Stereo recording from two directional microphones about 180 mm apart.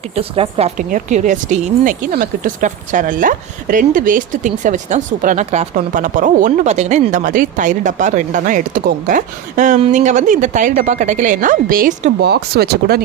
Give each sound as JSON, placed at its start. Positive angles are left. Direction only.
{"t": 0.2, "sound": "a woman's voice", "side_deg": -30}
{"t": 0.8, "sound": "speech", "side_deg": -45}
{"t": 12.2, "sound": "speech", "side_deg": -60}